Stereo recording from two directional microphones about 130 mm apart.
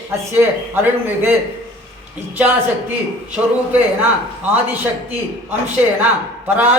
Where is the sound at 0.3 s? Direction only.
15° right (ahead or behind).